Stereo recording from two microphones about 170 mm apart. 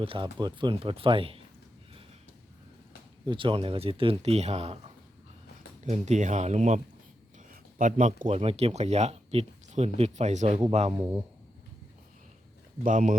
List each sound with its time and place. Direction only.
0.0 s speech: 30° right (ahead or behind)
3.2 s speech: 30° right (ahead or behind)
5.8 s speech: 45° right (ahead or behind)
12.8 s speech: 50° right (ahead or behind)